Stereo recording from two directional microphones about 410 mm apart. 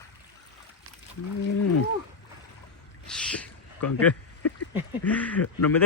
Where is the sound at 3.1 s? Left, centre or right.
Centre.